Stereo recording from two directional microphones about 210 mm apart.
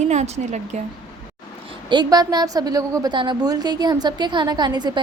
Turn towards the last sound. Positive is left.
turn(degrees=-20)  # may be behind; listen again after turning